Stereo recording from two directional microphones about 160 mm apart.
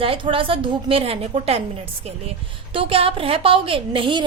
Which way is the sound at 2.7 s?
35° right (ahead or behind).